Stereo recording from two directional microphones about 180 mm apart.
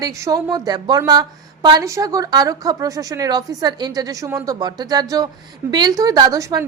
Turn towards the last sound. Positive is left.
turn(degrees=-20)  # may be behind; listen again after turning